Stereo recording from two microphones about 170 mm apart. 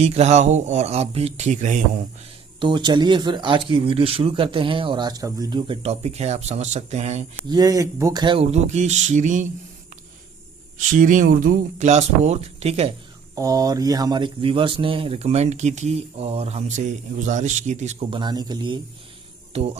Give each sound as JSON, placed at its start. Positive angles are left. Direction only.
{"t": 0.0, "sound": "speech", "side_deg": -40}
{"t": 2.6, "sound": "speech", "side_deg": -25}
{"t": 7.5, "sound": "speech", "side_deg": -20}
{"t": 10.8, "sound": "speech", "side_deg": -50}
{"t": 13.3, "sound": "speech", "side_deg": -20}
{"t": 18.1, "sound": "speech", "side_deg": -25}
{"t": 19.5, "sound": "speech", "side_deg": -35}